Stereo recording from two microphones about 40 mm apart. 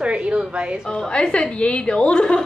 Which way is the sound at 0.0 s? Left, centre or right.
Right.